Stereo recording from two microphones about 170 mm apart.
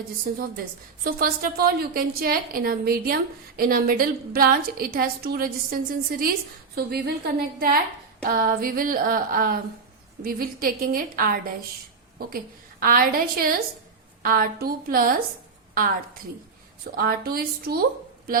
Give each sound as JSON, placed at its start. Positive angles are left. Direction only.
{"t": 0.3, "sound": "a woman's voice", "side_deg": -55}
{"t": 12.8, "sound": "a woman's voice", "side_deg": -55}
{"t": 17.0, "sound": "a woman's voice", "side_deg": -60}